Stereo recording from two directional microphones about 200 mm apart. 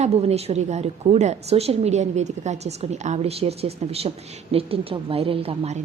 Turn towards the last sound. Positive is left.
turn(degrees=-30)  # may be behind; listen again after turning